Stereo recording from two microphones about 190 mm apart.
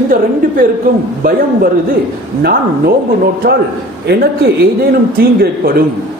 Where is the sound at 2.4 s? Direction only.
50° right (ahead or behind).